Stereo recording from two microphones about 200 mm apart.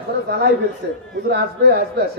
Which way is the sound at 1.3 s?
55° right (ahead or behind).